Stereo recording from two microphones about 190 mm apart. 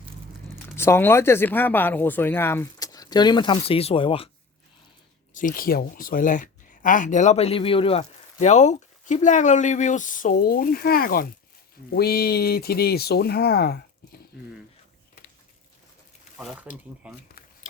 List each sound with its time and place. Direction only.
0.8 s speech: 10° left (ahead or behind); by 4.3 s 30° left (ahead or behind)
5.3 s speech: 45° left (ahead or behind)
16.4 s speech: centre (ahead or behind)